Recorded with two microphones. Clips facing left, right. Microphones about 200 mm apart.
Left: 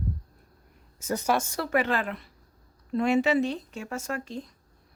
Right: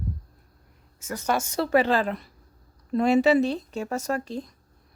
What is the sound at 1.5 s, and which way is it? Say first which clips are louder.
Speech: right 5 dB; 30° right (ahead or behind).